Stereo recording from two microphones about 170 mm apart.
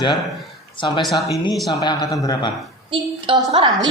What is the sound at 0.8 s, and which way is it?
Speech, 30° left (ahead or behind).